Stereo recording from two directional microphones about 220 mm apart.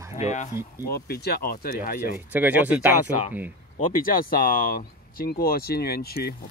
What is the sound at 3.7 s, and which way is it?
Speech, 40° left (ahead or behind).